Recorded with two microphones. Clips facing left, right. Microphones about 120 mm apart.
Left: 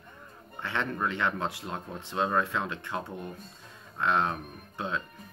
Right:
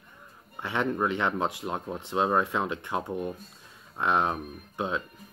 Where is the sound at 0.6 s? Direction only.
15° right (ahead or behind).